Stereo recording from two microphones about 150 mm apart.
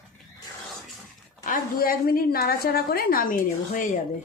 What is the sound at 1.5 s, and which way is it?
A woman's voice, 75° left (ahead or behind).